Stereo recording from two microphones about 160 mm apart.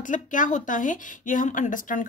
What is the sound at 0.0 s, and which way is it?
Speech, 55° left (ahead or behind).